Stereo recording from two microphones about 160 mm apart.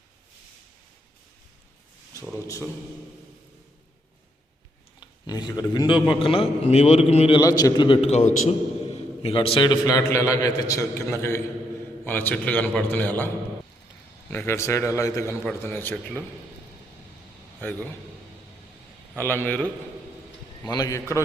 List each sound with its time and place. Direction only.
4.9 s a man's voice: 25° left (ahead or behind)
7.3 s a man's voice: 25° left (ahead or behind)
8.1 s a man's voice: 45° left (ahead or behind); by 16.2 s 15° left (ahead or behind)
17.6 s a man's voice: 10° left (ahead or behind)
19.1 s a man's voice: 10° left (ahead or behind)
20.7 s a man's voice: 25° left (ahead or behind)